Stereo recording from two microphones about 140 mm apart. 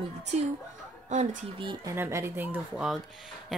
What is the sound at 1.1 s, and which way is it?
Speech, 60° right (ahead or behind).